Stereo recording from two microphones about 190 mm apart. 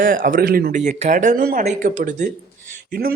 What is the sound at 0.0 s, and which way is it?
Speech, 45° right (ahead or behind).